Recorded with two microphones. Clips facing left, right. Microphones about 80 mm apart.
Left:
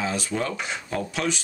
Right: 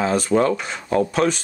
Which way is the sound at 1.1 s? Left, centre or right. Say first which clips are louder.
Right 8 dB; right.